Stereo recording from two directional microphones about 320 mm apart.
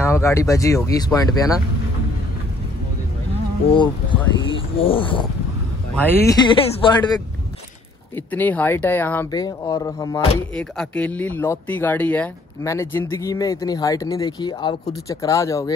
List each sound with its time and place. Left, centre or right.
0.0 s speech: centre
3.7 s speech: centre
8.3 s speech: centre